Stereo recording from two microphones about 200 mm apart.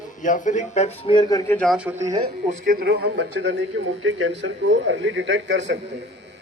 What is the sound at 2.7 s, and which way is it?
A man's voice, 50° right (ahead or behind).